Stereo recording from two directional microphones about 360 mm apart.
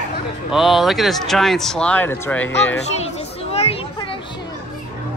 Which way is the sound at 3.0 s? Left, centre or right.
Centre.